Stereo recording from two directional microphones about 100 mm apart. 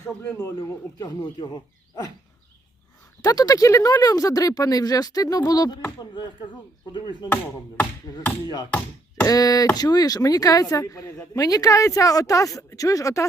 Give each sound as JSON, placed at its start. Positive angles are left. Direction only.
{"t": 0.0, "sound": "a man's voice", "side_deg": 25}
{"t": 0.9, "sound": "speech", "side_deg": 40}
{"t": 3.2, "sound": "speech", "side_deg": 35}
{"t": 9.2, "sound": "speech", "side_deg": 35}